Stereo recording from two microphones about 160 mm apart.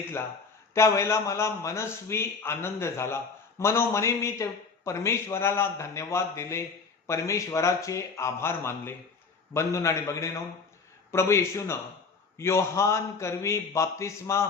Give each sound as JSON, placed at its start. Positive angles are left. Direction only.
{"t": 0.7, "sound": "a man's voice", "side_deg": 20}